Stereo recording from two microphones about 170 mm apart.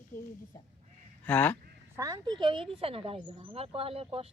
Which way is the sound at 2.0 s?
20° right (ahead or behind).